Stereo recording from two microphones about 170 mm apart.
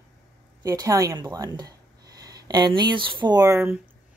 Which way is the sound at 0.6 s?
20° right (ahead or behind).